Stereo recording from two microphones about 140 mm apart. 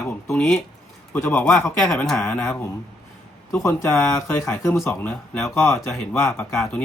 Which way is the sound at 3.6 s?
15° left (ahead or behind).